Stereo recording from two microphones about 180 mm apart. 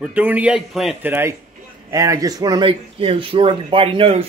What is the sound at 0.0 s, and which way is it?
Speech, 10° right (ahead or behind).